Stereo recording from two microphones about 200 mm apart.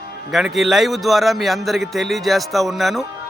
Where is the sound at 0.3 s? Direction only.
Centre (ahead or behind).